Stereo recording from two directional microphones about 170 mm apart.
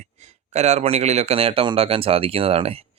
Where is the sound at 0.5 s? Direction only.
40° right (ahead or behind).